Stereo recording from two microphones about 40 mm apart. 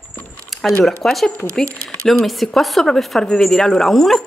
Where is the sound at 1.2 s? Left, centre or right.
Centre.